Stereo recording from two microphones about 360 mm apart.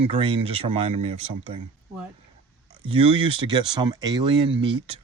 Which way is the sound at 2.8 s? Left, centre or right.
Centre.